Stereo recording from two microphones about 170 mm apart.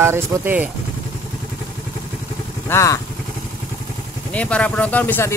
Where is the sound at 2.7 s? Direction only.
20° left (ahead or behind).